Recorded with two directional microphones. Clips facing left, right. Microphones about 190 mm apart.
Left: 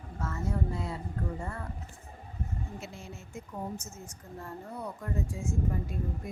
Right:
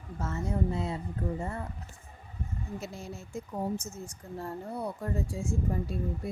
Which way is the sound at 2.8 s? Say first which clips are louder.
Right 4 dB; 40° right (ahead or behind).